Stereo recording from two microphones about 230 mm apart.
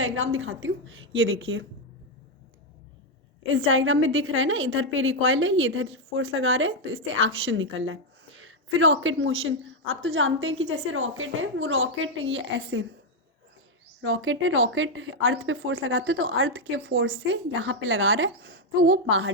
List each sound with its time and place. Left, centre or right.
0.0 s a woman's voice: right
3.4 s a woman's voice: right
14.0 s a woman's voice: right